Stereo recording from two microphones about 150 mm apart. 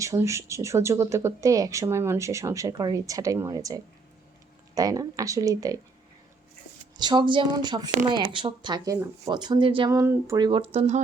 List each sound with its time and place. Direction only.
0.0 s speech: 20° right (ahead or behind)
6.9 s speech: 30° right (ahead or behind)
9.9 s speech: 20° right (ahead or behind); by 11.0 s 50° right (ahead or behind)